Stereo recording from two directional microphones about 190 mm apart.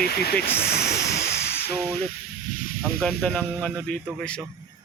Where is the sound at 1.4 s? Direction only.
10° left (ahead or behind).